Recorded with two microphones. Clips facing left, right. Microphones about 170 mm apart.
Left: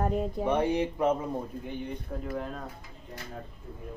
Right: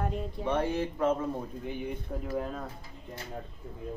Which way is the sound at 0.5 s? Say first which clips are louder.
Left 2 dB; 15° left (ahead or behind).